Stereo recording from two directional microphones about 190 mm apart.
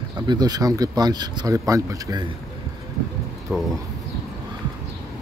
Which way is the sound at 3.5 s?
10° right (ahead or behind).